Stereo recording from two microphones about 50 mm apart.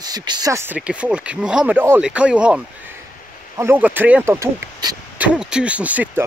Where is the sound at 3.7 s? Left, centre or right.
Right.